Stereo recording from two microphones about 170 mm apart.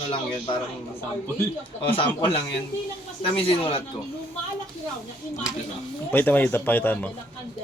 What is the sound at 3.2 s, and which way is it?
Speech, 35° left (ahead or behind).